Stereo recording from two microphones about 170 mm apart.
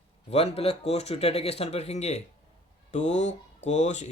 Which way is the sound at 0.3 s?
35° left (ahead or behind).